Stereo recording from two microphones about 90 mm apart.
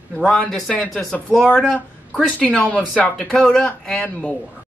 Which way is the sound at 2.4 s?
15° left (ahead or behind).